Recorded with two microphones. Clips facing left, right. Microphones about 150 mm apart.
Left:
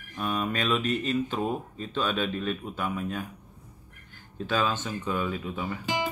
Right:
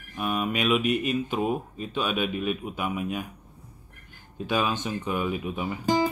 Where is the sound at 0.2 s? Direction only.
10° right (ahead or behind).